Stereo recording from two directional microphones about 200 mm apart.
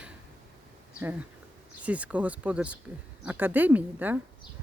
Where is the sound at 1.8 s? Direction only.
5° right (ahead or behind).